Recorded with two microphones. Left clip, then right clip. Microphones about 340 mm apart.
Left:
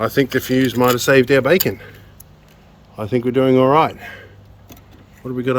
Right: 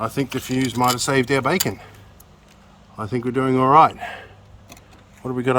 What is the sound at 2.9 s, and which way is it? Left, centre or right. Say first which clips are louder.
Speech: left 6 dB; centre.